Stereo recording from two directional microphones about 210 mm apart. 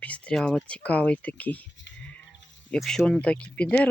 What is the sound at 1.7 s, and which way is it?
Livestock, 60° left (ahead or behind).